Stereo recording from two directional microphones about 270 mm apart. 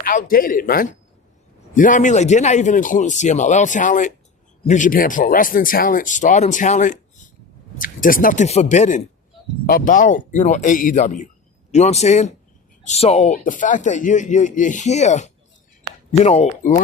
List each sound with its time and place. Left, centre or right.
0.0 s a man's voice: left